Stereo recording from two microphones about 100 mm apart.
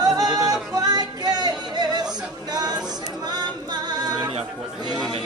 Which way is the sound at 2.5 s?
40° right (ahead or behind).